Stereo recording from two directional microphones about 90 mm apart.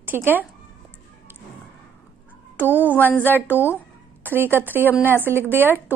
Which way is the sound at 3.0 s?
20° left (ahead or behind).